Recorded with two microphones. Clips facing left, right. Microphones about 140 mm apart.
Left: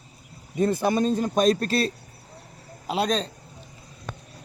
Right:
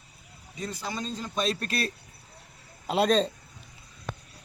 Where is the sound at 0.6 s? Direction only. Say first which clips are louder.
Left 13 dB; 55° left (ahead or behind).